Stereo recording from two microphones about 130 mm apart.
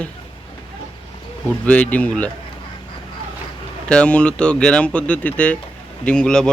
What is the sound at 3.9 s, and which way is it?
Speech, 10° left (ahead or behind).